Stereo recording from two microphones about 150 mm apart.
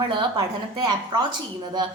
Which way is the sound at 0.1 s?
30° right (ahead or behind).